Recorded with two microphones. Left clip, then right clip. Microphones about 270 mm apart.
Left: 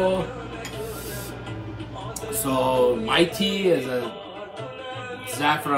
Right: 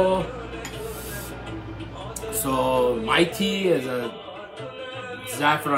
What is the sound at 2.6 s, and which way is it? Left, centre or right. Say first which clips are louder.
Mantra: left 1 dB; centre.